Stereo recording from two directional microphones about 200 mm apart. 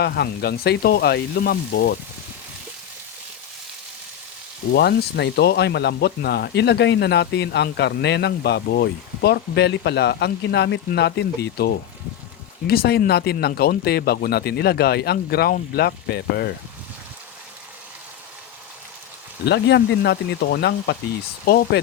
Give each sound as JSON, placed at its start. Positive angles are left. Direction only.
{"t": 0.0, "sound": "speech", "side_deg": 55}
{"t": 4.7, "sound": "speech", "side_deg": 55}
{"t": 19.5, "sound": "speech", "side_deg": 60}